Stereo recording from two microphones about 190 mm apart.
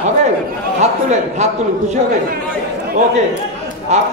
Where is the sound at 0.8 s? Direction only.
35° right (ahead or behind).